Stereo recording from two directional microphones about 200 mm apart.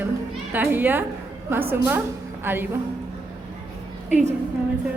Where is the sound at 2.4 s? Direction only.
10° right (ahead or behind).